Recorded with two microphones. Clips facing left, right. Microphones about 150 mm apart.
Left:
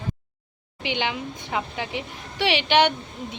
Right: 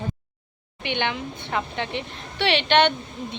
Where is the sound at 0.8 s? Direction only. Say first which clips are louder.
Even; 10° left (ahead or behind).